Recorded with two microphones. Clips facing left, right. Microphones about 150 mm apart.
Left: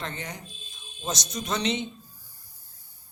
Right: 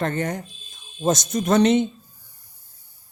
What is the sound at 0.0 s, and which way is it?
Speech, 50° right (ahead or behind).